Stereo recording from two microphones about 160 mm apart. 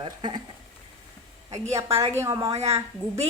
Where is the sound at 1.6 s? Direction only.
40° right (ahead or behind).